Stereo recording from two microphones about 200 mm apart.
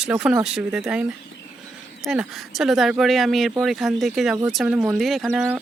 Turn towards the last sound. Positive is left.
turn(degrees=-5)  # may be behind; listen again after turning